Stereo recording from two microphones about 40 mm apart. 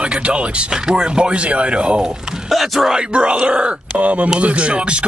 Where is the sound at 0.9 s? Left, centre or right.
Right.